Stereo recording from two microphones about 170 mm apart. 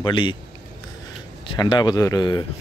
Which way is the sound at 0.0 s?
25° left (ahead or behind).